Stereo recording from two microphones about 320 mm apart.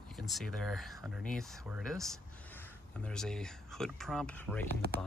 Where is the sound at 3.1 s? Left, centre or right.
Centre.